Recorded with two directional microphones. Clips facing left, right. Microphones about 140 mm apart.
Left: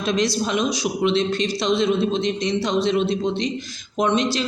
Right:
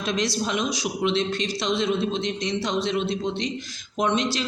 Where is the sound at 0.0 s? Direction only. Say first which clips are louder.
Left 4 dB; 30° left (ahead or behind).